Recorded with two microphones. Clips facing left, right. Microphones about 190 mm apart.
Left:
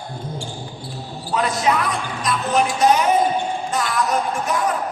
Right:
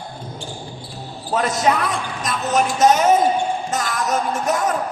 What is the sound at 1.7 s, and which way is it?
Music, 45° right (ahead or behind).